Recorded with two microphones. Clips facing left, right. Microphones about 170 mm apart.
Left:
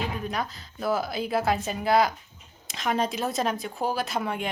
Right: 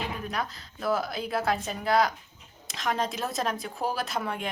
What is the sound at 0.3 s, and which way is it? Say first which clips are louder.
A woman's voice: left 2 dB; centre (ahead or behind).